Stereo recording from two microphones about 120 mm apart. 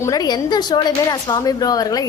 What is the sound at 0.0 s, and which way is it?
A woman's voice, 30° left (ahead or behind).